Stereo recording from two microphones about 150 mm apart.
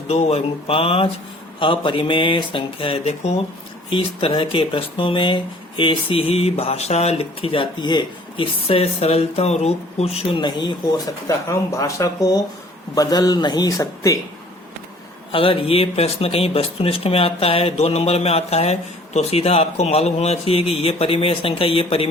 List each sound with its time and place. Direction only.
0.1 s speech: 45° left (ahead or behind)
8.6 s a man's voice: 40° left (ahead or behind); by 14.2 s 25° left (ahead or behind)
15.3 s speech: 35° left (ahead or behind)